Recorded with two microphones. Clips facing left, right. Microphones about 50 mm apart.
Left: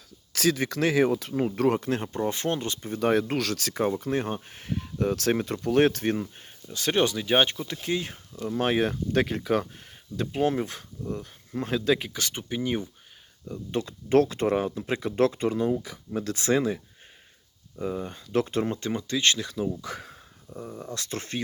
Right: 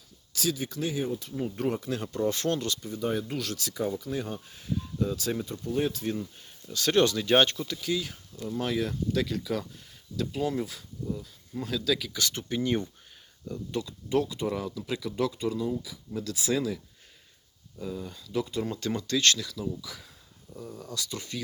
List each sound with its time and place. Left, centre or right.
0.3 s speech: left
1.9 s speech: left
2.9 s speech: left
6.7 s speech: left
7.7 s speech: left
12.3 s speech: centre
13.7 s speech: left
14.1 s speech: left
19.5 s speech: left
19.8 s speech: left
20.5 s speech: left
20.9 s speech: left